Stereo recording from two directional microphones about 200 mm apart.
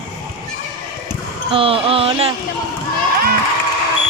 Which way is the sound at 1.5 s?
25° right (ahead or behind).